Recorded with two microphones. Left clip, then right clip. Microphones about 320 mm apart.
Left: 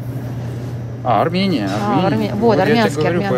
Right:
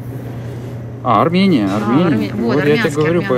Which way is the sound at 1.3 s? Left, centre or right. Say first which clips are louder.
Right 4 dB; right.